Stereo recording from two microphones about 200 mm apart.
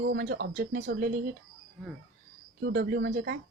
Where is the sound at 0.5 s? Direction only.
45° right (ahead or behind).